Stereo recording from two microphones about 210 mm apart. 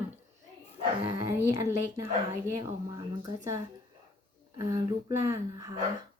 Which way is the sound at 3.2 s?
15° right (ahead or behind).